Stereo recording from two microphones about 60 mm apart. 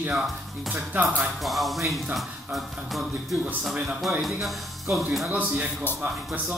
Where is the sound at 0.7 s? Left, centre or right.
Right.